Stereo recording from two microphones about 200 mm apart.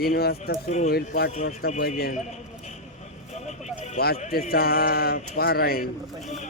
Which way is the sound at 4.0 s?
50° left (ahead or behind).